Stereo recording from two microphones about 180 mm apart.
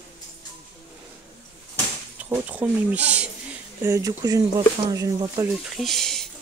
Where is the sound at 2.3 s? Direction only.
10° right (ahead or behind).